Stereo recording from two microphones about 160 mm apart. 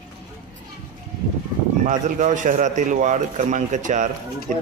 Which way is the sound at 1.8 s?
50° right (ahead or behind).